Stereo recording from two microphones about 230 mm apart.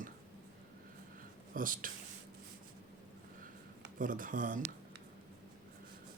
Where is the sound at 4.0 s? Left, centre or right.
Right.